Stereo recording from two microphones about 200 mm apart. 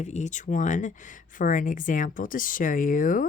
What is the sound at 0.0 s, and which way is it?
Speech, 35° left (ahead or behind).